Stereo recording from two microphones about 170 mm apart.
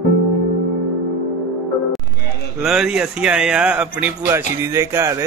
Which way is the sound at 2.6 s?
5° right (ahead or behind).